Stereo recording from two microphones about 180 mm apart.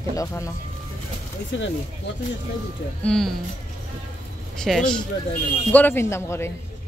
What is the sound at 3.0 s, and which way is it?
Speech, 5° left (ahead or behind).